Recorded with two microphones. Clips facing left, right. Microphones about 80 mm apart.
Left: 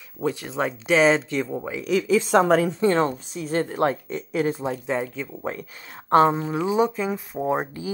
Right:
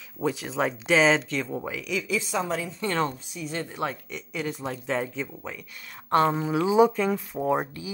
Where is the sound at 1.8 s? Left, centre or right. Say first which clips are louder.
Left 11 dB; left.